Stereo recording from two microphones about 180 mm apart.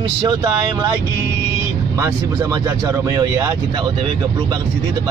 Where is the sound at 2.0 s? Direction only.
20° right (ahead or behind).